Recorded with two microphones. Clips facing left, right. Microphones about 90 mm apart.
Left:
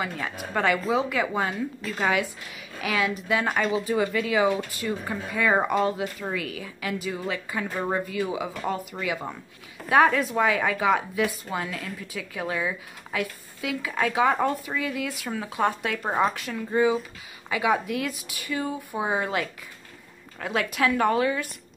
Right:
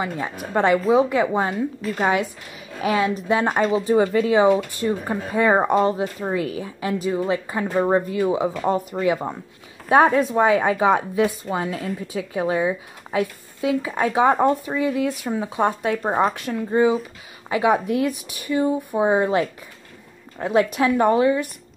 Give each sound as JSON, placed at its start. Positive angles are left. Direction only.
{"t": 0.0, "sound": "a woman's voice", "side_deg": -20}